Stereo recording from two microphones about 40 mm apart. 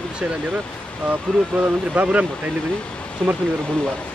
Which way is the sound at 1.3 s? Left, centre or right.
Left.